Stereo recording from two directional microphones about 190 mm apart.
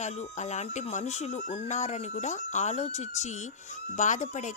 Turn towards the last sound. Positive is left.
turn(degrees=40)  # may be behind; listen again after turning